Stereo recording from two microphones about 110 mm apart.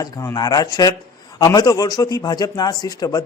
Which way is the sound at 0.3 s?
35° left (ahead or behind).